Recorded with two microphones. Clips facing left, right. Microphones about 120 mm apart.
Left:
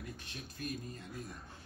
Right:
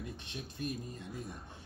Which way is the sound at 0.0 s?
20° right (ahead or behind).